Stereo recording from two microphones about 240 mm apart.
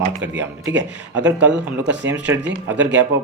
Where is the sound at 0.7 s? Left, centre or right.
Right.